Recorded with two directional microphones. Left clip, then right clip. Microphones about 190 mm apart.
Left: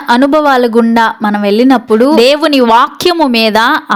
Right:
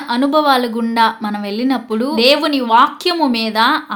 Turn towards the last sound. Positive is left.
turn(degrees=40)  # may be behind; listen again after turning